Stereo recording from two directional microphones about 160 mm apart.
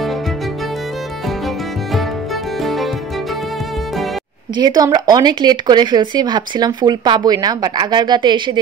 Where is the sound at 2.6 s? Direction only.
Centre (ahead or behind).